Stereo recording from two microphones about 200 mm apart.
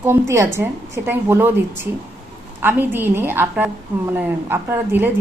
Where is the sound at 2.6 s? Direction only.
10° right (ahead or behind).